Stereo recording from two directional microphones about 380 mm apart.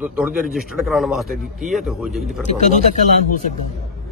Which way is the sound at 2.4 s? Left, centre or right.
Centre.